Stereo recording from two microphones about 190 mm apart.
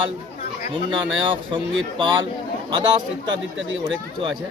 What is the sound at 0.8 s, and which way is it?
Speech, 25° right (ahead or behind).